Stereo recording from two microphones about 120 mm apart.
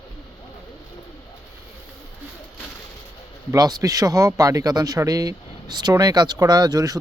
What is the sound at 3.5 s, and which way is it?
Speech, 35° right (ahead or behind).